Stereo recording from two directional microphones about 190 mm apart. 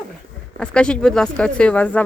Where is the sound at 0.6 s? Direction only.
5° left (ahead or behind).